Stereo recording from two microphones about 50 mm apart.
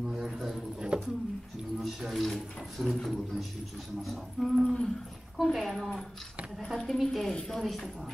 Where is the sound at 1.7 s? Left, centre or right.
Centre.